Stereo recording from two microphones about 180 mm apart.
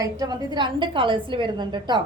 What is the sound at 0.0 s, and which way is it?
A woman's voice, 20° right (ahead or behind).